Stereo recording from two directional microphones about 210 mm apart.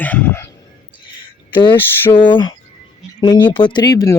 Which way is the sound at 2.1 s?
20° left (ahead or behind).